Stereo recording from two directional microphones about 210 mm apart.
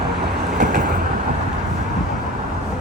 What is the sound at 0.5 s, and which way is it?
Vehicle, 35° right (ahead or behind).